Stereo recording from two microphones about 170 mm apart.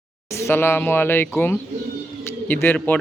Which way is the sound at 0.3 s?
15° left (ahead or behind).